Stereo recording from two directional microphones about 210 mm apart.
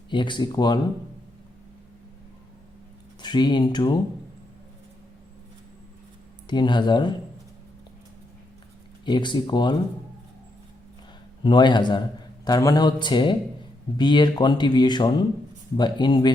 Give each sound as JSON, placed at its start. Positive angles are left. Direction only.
{"t": 0.1, "sound": "speech", "side_deg": 20}
{"t": 3.2, "sound": "speech", "side_deg": 20}
{"t": 6.5, "sound": "speech", "side_deg": 20}
{"t": 9.0, "sound": "speech", "side_deg": 20}
{"t": 11.4, "sound": "speech", "side_deg": 20}